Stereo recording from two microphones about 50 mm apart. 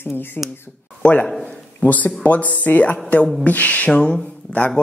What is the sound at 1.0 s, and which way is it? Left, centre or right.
A man's voice, left.